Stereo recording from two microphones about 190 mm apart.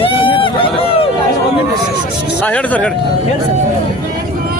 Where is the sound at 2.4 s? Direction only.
10° left (ahead or behind).